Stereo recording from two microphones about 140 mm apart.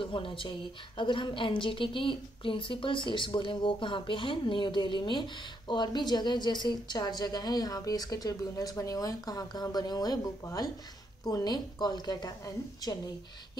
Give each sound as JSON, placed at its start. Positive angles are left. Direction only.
{"t": 0.0, "sound": "a woman's voice", "side_deg": 40}